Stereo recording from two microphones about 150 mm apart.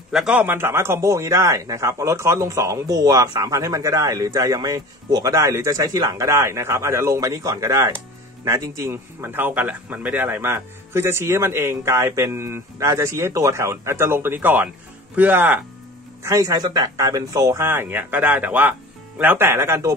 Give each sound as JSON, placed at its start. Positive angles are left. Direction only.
{"t": 0.1, "sound": "a man's voice", "side_deg": -5}